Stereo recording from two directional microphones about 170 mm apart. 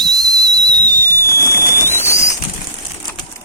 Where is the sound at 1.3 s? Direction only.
15° right (ahead or behind).